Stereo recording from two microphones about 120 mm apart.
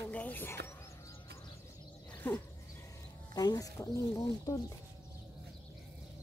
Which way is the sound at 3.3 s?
30° left (ahead or behind).